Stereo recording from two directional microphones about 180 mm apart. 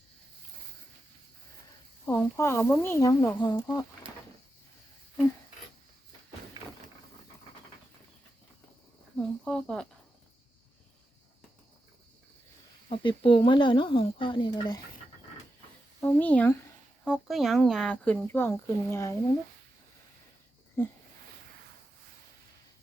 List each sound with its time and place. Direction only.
2.0 s speech: 15° left (ahead or behind)
9.1 s speech: 5° left (ahead or behind)
12.9 s speech: 30° left (ahead or behind)
16.0 s speech: 10° left (ahead or behind)